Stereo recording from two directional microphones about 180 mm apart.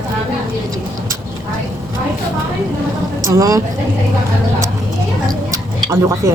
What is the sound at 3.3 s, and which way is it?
Speech, 20° right (ahead or behind).